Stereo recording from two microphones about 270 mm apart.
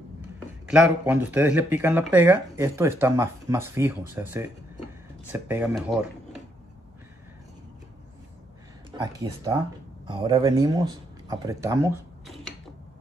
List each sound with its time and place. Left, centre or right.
0.7 s speech: centre
8.9 s speech: centre